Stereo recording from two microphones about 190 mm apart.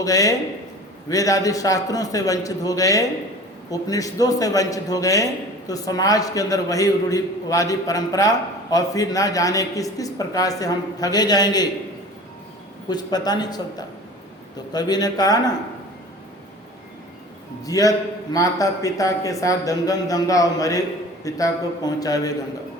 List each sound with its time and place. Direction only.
0.0 s a man's voice: 20° left (ahead or behind)
12.9 s a man's voice: 20° left (ahead or behind)
17.6 s a man's voice: 20° left (ahead or behind)